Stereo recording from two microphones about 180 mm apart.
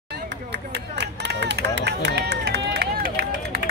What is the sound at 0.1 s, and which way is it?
Run, 70° right (ahead or behind).